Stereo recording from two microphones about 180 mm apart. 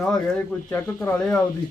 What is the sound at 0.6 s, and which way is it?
Speech, 10° left (ahead or behind).